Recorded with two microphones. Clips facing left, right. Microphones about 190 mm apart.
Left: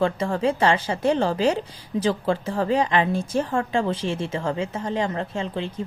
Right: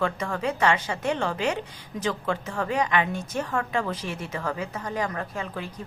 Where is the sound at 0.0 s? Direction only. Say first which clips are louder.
Left 5 dB; 30° left (ahead or behind).